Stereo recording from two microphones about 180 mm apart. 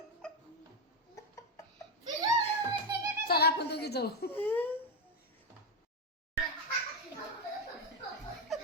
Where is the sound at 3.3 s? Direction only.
60° left (ahead or behind).